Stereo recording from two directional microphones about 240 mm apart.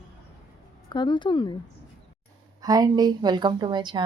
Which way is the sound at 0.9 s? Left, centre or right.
Centre.